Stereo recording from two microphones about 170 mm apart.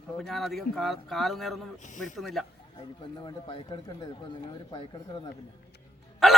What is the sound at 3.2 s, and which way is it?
Speech, 30° left (ahead or behind).